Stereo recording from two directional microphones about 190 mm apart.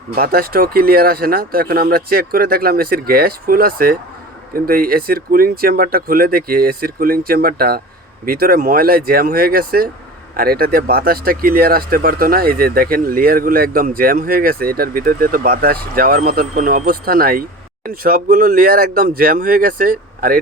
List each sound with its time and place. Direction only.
0.1 s speech: 50° right (ahead or behind)